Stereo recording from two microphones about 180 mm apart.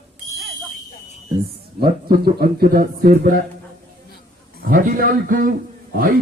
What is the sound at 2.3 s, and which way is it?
Speech, 55° right (ahead or behind).